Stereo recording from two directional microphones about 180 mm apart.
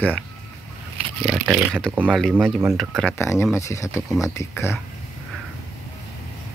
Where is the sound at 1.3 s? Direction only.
5° right (ahead or behind).